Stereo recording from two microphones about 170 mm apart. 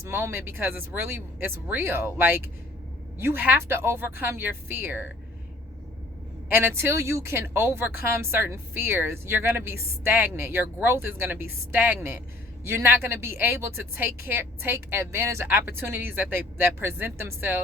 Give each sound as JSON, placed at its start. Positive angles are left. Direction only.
{"t": 0.0, "sound": "a woman's voice", "side_deg": -15}
{"t": 6.5, "sound": "a woman's voice", "side_deg": -15}